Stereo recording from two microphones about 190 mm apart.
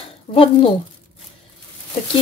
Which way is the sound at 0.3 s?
30° left (ahead or behind).